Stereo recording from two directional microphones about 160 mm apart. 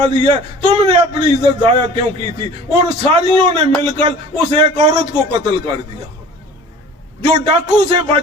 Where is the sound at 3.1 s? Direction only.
30° right (ahead or behind).